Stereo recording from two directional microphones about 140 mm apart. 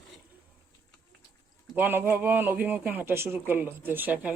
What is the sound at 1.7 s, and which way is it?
A man's voice, 15° right (ahead or behind).